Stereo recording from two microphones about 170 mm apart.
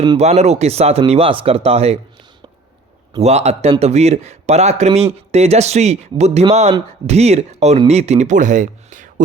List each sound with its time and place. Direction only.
0.2 s speech: 40° right (ahead or behind)
3.2 s speech: 40° right (ahead or behind)